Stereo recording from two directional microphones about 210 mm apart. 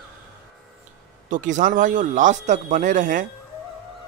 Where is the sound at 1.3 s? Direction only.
35° right (ahead or behind).